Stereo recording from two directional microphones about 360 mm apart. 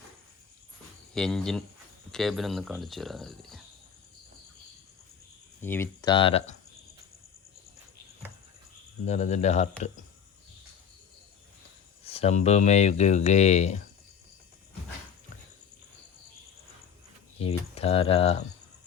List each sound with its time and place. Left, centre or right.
1.1 s speech: centre
5.5 s speech: centre
9.0 s speech: centre
12.0 s speech: centre
17.4 s speech: centre